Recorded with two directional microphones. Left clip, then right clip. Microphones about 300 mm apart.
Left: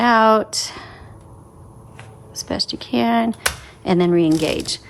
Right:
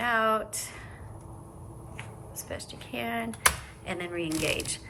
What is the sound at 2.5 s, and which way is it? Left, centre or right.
A woman's voice, left.